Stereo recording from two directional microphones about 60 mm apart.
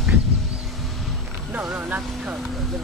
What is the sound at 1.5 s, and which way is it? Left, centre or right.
Vehicle, right.